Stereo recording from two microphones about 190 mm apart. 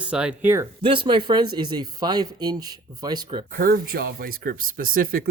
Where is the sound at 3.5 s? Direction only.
50° right (ahead or behind).